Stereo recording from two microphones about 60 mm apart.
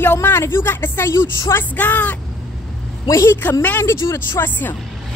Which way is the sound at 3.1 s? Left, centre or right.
Left.